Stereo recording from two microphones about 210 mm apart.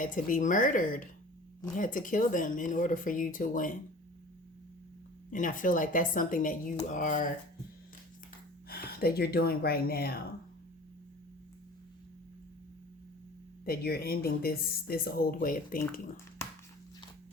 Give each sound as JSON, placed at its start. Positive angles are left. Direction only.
{"t": 0.0, "sound": "a woman's voice", "side_deg": 40}
{"t": 5.3, "sound": "a woman's voice", "side_deg": 40}
{"t": 8.7, "sound": "speech", "side_deg": 45}
{"t": 13.7, "sound": "speech", "side_deg": 45}